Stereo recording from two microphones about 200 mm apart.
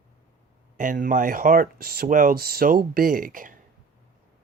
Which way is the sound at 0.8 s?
40° right (ahead or behind).